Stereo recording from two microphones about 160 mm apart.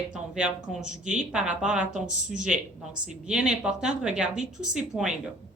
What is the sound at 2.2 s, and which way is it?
Speech, 50° right (ahead or behind).